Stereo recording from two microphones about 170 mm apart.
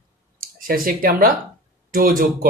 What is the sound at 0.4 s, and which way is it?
Speech, 55° right (ahead or behind).